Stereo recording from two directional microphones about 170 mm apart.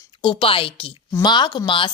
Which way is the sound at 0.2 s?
30° left (ahead or behind).